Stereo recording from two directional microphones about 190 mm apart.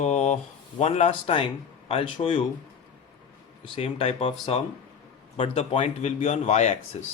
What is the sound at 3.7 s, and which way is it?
Speech, 30° left (ahead or behind).